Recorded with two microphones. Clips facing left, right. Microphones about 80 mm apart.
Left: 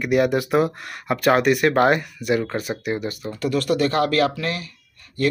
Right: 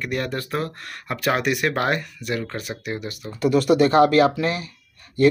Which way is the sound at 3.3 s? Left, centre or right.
Centre.